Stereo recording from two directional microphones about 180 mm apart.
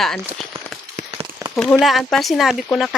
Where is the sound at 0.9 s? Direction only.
35° right (ahead or behind).